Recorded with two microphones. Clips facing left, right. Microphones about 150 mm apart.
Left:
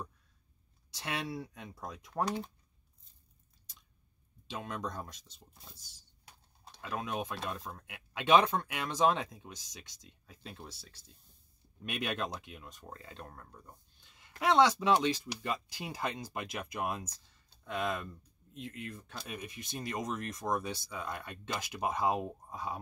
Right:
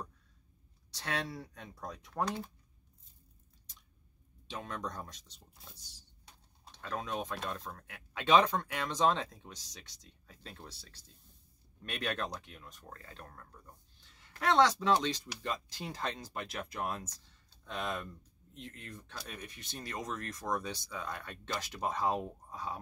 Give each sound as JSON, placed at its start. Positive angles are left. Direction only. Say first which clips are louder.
{"t": 0.9, "sound": "speech", "louder": "even", "side_deg": 10}
{"t": 4.5, "sound": "speech", "louder": "left 1 dB", "side_deg": 10}
{"t": 6.7, "sound": "speech", "louder": "left 1 dB", "side_deg": 10}
{"t": 14.0, "sound": "speech", "louder": "left 2 dB", "side_deg": 15}